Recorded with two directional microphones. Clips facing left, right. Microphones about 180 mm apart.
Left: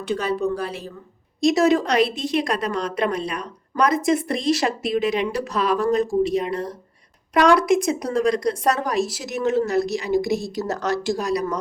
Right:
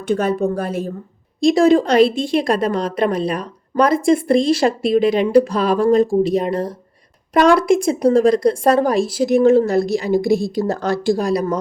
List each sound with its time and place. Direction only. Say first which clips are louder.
0.1 s speech: right 5 dB; 50° right (ahead or behind)
1.4 s a woman's voice: right 5 dB; 30° right (ahead or behind)